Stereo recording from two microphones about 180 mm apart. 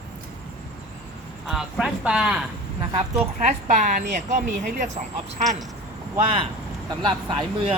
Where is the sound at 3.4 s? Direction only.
45° right (ahead or behind).